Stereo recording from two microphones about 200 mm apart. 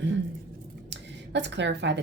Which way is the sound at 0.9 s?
60° right (ahead or behind).